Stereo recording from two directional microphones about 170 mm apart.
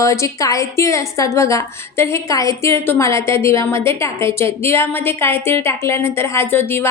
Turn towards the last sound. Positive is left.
turn(degrees=15)  # may be behind; listen again after turning